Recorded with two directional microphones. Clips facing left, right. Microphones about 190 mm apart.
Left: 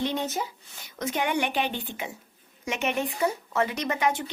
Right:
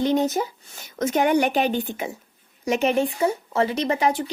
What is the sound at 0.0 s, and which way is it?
Speech, 45° right (ahead or behind).